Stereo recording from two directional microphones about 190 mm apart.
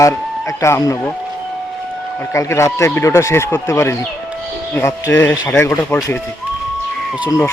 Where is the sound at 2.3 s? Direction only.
15° left (ahead or behind).